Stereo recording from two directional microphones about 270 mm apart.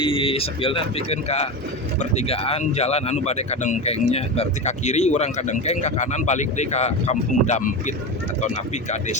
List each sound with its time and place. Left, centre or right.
0.0 s speech: centre